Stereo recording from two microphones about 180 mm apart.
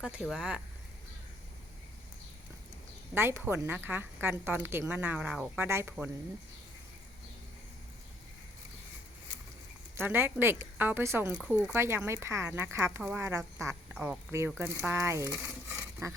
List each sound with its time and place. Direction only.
0.0 s speech: 5° right (ahead or behind)
3.2 s speech: 10° right (ahead or behind)
9.9 s speech: 10° right (ahead or behind)
15.7 s rub: 15° right (ahead or behind)